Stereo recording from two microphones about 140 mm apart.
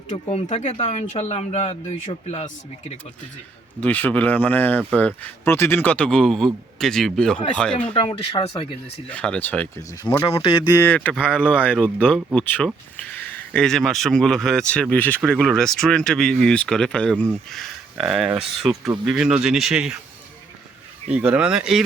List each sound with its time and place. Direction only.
0.1 s speech: 45° left (ahead or behind)
3.8 s speech: 10° left (ahead or behind)
7.9 s speech: 35° left (ahead or behind)
9.0 s speech: 10° left (ahead or behind)
10.2 s speech: 40° left (ahead or behind)
10.8 s speech: 10° left (ahead or behind); by 20.0 s 5° right (ahead or behind)
21.1 s speech: 10° right (ahead or behind)